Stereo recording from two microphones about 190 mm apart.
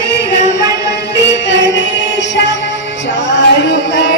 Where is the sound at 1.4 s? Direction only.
70° left (ahead or behind).